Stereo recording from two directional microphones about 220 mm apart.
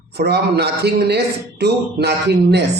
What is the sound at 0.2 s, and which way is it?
Speech, 45° right (ahead or behind).